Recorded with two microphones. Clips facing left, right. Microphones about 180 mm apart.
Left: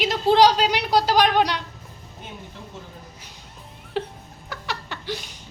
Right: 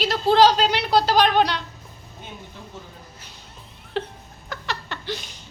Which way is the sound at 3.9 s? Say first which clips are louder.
Even; 10° left (ahead or behind).